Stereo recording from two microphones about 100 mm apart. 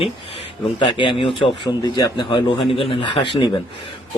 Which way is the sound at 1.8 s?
40° left (ahead or behind).